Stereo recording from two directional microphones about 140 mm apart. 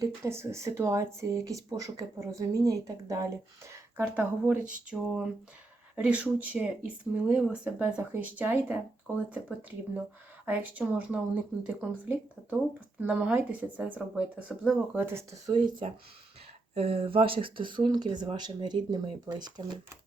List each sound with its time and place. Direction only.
0.3 s speech: 20° right (ahead or behind)
16.7 s speech: 45° right (ahead or behind)